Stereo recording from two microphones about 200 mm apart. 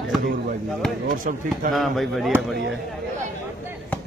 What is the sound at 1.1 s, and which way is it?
Speech, 45° right (ahead or behind).